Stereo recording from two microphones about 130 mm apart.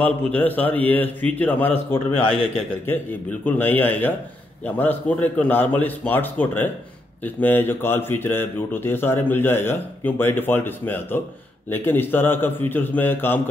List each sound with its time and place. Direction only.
0.0 s a man's voice: 15° left (ahead or behind)